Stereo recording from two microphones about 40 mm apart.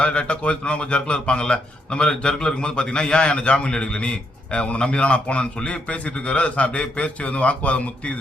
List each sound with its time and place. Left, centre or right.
0.0 s a man's voice: left